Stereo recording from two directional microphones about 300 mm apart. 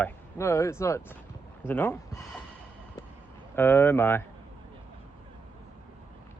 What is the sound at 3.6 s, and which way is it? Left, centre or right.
Speech, centre.